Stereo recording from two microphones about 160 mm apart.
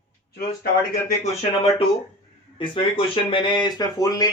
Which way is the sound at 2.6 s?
30° left (ahead or behind).